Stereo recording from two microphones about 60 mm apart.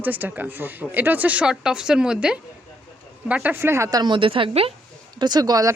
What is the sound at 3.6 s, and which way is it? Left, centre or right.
Speech, right.